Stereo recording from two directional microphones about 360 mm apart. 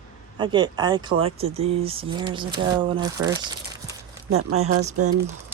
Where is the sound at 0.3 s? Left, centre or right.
Centre.